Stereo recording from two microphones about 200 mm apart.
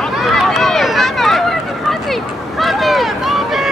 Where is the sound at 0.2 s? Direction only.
Centre (ahead or behind).